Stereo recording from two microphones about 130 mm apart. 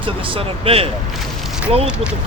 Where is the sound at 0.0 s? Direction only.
45° right (ahead or behind).